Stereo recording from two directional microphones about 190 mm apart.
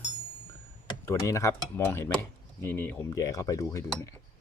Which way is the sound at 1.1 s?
15° left (ahead or behind).